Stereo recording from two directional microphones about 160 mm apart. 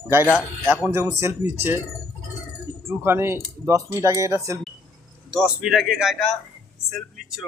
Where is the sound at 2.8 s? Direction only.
15° right (ahead or behind).